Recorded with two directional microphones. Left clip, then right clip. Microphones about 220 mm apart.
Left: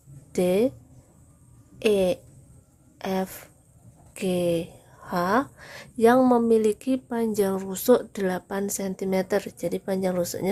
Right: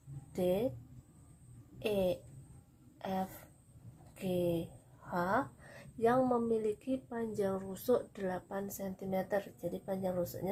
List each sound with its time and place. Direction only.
0.3 s speech: 45° left (ahead or behind)
1.8 s speech: 45° left (ahead or behind)